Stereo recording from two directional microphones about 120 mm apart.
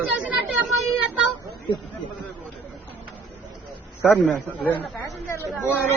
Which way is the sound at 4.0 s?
Centre (ahead or behind).